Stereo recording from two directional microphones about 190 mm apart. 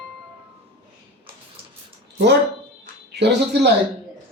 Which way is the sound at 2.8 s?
60° right (ahead or behind).